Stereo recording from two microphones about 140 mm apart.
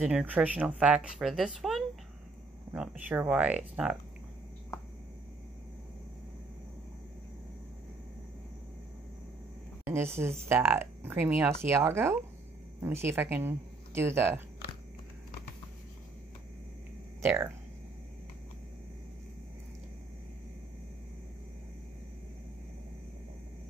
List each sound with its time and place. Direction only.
0.0 s speech: 10° right (ahead or behind)
9.8 s speech: 20° right (ahead or behind)
17.2 s speech: 20° right (ahead or behind)